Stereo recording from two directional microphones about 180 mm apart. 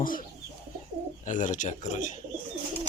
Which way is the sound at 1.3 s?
45° left (ahead or behind).